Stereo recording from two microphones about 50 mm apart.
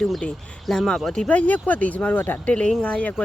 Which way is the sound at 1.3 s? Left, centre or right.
Left.